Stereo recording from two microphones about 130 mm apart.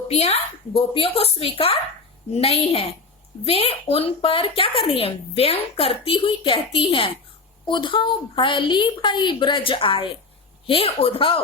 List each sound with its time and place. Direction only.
0.1 s a woman's voice: 50° left (ahead or behind)